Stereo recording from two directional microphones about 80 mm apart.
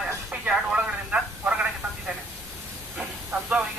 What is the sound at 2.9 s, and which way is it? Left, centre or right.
Hiss, centre.